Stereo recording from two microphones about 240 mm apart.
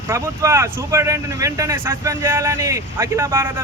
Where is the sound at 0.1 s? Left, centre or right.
Centre.